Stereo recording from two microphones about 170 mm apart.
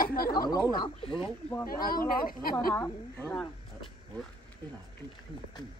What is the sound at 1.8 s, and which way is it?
Speech, 60° left (ahead or behind).